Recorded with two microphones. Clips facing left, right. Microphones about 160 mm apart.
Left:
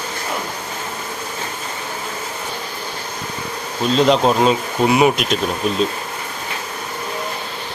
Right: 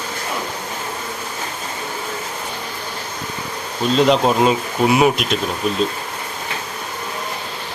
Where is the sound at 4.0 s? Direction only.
Centre (ahead or behind).